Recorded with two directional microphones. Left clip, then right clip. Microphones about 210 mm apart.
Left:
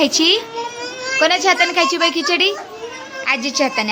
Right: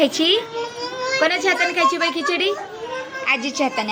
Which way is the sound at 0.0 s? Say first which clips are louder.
Left 3 dB; 20° left (ahead or behind).